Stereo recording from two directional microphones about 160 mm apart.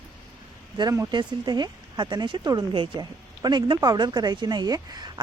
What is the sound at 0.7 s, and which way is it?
Speech, 20° right (ahead or behind).